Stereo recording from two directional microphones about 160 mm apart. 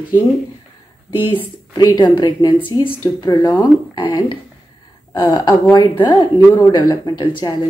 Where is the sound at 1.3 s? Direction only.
30° left (ahead or behind).